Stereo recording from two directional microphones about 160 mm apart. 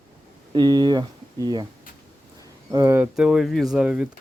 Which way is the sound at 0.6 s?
25° right (ahead or behind).